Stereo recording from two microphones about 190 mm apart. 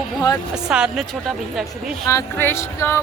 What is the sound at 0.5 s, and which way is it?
A woman's voice, 5° right (ahead or behind).